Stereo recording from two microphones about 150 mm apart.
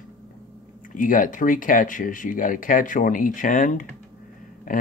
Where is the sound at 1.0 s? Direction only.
65° left (ahead or behind).